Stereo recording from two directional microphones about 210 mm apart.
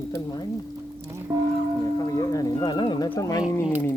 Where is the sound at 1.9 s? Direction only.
15° left (ahead or behind).